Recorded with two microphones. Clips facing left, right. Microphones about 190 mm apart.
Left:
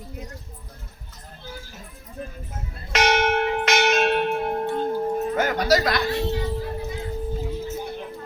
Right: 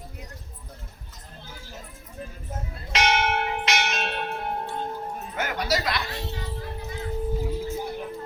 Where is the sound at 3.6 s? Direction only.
55° left (ahead or behind).